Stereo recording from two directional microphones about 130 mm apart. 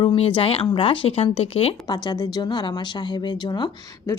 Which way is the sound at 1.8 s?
35° left (ahead or behind).